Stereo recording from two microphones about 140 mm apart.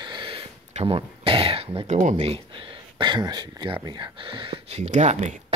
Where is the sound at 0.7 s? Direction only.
40° right (ahead or behind).